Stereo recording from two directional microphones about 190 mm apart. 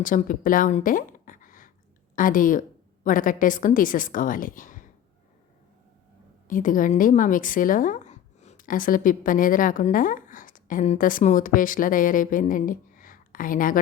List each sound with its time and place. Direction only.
0.0 s a woman's voice: 45° left (ahead or behind)
6.5 s a woman's voice: 45° left (ahead or behind)